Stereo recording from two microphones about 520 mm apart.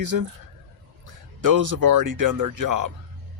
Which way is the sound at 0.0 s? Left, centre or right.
Right.